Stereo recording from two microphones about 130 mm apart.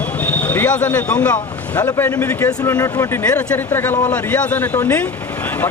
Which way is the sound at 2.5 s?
25° left (ahead or behind).